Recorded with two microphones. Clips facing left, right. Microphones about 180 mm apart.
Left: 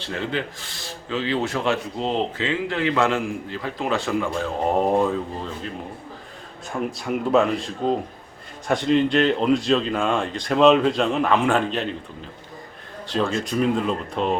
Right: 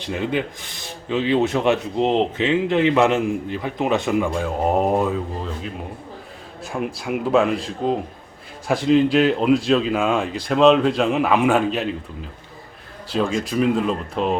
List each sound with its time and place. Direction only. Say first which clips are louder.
0.0 s speech: right 4 dB; 15° right (ahead or behind)
7.0 s speech: right 1 dB; 5° right (ahead or behind)
13.1 s speech: right 2 dB; 5° right (ahead or behind)